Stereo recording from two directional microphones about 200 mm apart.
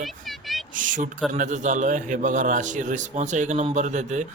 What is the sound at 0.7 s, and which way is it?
Speech, 40° right (ahead or behind).